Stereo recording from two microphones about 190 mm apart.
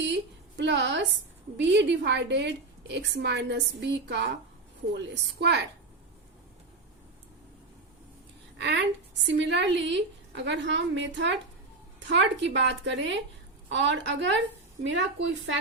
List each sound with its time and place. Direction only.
0.0 s a woman's voice: 65° right (ahead or behind)
8.5 s a woman's voice: 65° right (ahead or behind)